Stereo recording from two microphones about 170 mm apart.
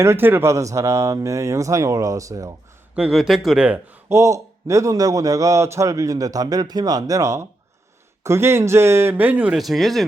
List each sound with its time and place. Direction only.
0.0 s speech: 15° right (ahead or behind)
2.9 s speech: 5° right (ahead or behind)